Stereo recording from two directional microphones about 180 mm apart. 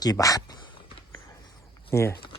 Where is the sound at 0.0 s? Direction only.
20° left (ahead or behind).